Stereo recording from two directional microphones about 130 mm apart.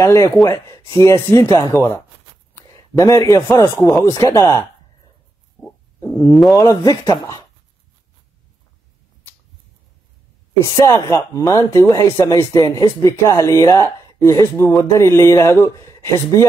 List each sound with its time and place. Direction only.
0.0 s speech: 25° left (ahead or behind)
2.5 s a sound: 25° left (ahead or behind)
3.5 s speech: 20° left (ahead or behind)
5.9 s speech: 25° left (ahead or behind)
10.6 s speech: 25° left (ahead or behind)